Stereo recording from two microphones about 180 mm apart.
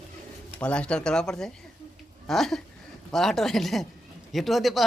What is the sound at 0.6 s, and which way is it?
Speech, 5° left (ahead or behind).